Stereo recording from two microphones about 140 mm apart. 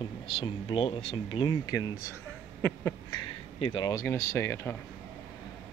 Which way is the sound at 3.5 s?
45° left (ahead or behind).